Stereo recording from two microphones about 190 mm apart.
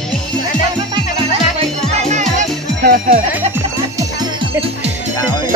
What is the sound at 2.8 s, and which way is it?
Music, 50° right (ahead or behind).